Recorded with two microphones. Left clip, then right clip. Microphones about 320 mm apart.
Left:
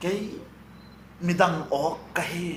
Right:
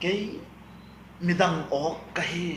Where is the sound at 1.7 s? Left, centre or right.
Left.